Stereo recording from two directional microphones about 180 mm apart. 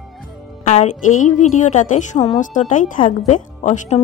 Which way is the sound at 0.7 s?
45° left (ahead or behind).